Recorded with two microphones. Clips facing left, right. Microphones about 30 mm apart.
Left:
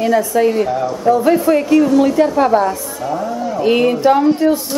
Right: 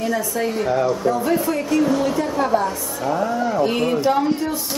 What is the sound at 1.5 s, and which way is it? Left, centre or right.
Speech, left.